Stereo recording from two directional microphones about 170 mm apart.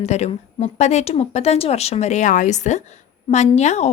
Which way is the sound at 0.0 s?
40° left (ahead or behind).